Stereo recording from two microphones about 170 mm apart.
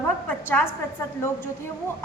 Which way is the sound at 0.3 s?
10° left (ahead or behind).